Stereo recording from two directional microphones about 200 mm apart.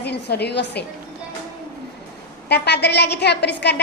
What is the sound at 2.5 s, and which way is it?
A woman's voice, 55° left (ahead or behind).